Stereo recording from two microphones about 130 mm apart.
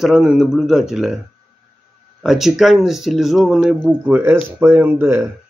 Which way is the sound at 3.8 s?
10° right (ahead or behind).